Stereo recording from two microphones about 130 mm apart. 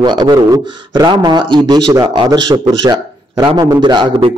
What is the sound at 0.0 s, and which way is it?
A man's voice, 35° right (ahead or behind).